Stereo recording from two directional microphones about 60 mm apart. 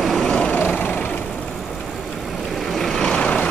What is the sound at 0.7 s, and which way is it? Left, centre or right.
Vehicle, left.